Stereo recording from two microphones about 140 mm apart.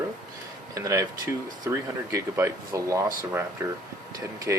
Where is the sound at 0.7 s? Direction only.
20° right (ahead or behind).